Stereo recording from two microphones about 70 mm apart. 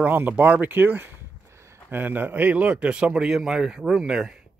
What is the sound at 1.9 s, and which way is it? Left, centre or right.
A man's voice, right.